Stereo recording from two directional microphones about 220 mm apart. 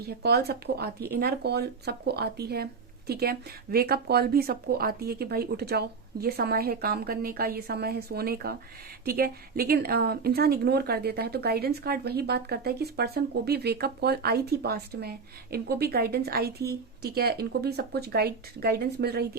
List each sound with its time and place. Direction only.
0.0 s a woman's voice: 45° right (ahead or behind)